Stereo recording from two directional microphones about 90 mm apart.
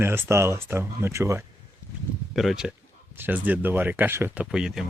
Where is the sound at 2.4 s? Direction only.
5° right (ahead or behind).